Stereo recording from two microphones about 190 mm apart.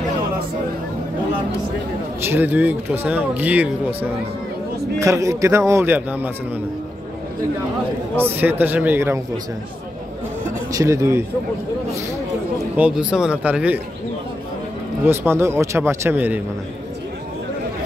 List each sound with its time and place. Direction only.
2.2 s speech: 10° right (ahead or behind)
8.2 s speech: 10° right (ahead or behind)
10.7 s speech: 15° right (ahead or behind)
12.7 s speech: 5° right (ahead or behind)
15.0 s speech: 10° right (ahead or behind)